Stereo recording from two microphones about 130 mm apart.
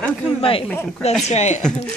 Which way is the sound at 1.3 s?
60° left (ahead or behind).